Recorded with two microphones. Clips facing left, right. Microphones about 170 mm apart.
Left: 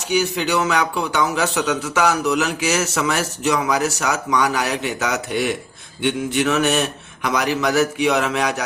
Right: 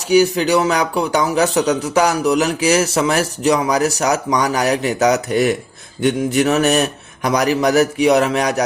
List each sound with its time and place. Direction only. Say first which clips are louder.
0.1 s speech: right 7 dB; 35° right (ahead or behind)